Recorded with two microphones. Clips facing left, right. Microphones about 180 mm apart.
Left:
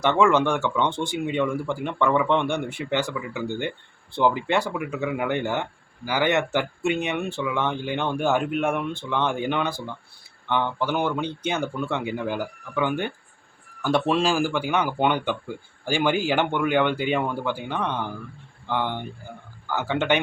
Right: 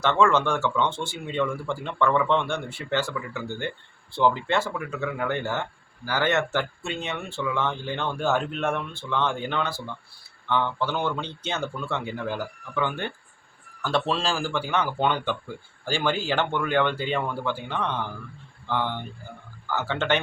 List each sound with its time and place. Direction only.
0.0 s a man's voice: 15° left (ahead or behind)